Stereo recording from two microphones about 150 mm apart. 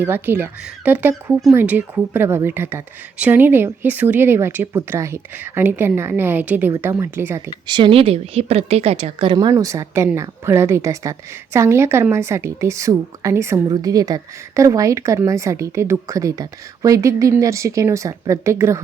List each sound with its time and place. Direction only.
0.0 s a woman's voice: 15° right (ahead or behind)
7.7 s a woman's voice: 35° right (ahead or behind); by 18.8 s 20° right (ahead or behind)